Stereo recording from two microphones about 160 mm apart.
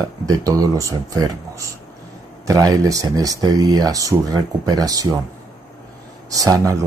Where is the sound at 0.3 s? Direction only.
20° right (ahead or behind).